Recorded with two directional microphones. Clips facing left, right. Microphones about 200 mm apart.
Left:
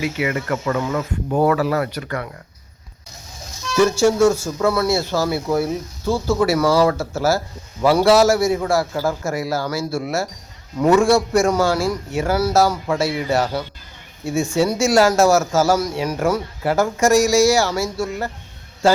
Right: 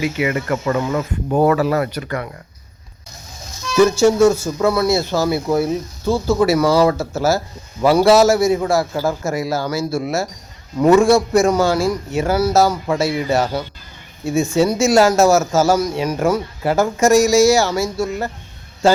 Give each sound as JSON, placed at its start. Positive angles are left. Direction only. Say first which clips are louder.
{"t": 0.0, "sound": "speech", "louder": "right 2 dB", "side_deg": -20}
{"t": 3.8, "sound": "speech", "louder": "right 3 dB", "side_deg": -20}